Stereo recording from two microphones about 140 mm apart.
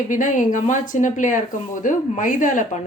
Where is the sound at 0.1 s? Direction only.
65° left (ahead or behind).